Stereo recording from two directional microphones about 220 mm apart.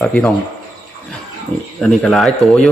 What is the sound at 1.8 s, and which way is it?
Speech, centre (ahead or behind).